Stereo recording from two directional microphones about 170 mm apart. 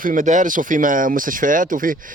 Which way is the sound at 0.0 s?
50° right (ahead or behind).